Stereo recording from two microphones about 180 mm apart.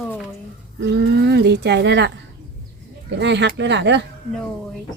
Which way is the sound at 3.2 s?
75° right (ahead or behind).